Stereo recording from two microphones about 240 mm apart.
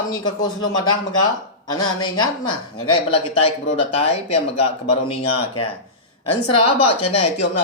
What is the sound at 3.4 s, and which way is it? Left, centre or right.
Speech, left.